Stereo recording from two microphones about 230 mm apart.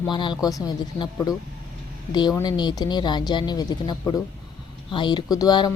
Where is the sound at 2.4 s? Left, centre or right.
Centre.